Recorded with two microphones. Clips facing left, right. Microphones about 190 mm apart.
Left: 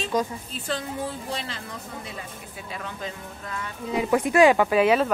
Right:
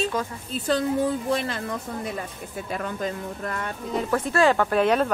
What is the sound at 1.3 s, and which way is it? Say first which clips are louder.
Speech: right 8 dB; 50° right (ahead or behind).